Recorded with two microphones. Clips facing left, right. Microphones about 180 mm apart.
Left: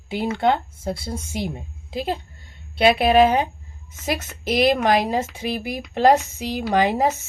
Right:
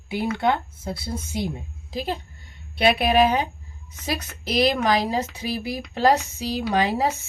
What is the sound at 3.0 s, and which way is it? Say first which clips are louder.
A woman's voice: left 4 dB; 50° left (ahead or behind).